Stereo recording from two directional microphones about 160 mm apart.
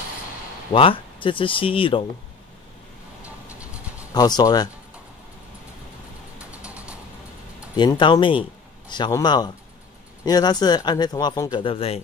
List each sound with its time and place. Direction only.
0.7 s speech: 35° left (ahead or behind)
3.2 s vehicle: 10° right (ahead or behind)
4.1 s speech: 25° left (ahead or behind)
6.3 s a sound: 10° right (ahead or behind)
7.7 s speech: 30° left (ahead or behind)
11.6 s speech: 35° left (ahead or behind)